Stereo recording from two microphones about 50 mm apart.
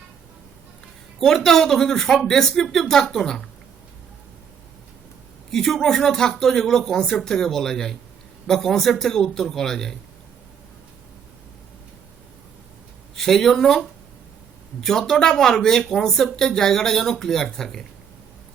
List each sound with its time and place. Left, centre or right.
1.2 s speech: centre
5.5 s speech: centre
13.1 s speech: centre